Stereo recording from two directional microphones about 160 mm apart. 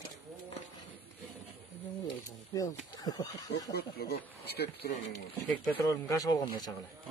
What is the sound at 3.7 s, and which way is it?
Speech, 85° left.